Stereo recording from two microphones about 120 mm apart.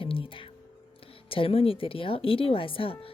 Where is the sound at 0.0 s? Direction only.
45° left (ahead or behind).